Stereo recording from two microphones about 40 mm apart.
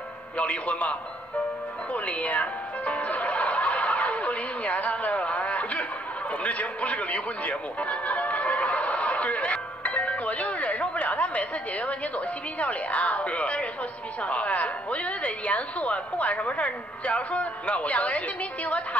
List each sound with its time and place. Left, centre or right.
0.4 s speech: left
2.0 s music: left
6.4 s speech: left